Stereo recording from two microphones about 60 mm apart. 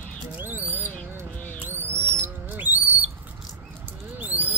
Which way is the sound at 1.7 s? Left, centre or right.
Right.